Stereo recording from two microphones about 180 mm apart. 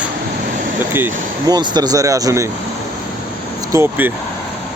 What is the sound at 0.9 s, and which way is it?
Speech, 15° right (ahead or behind).